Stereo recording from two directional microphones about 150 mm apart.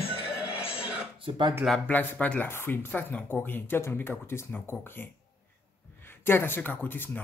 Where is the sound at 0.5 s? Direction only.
40° left (ahead or behind).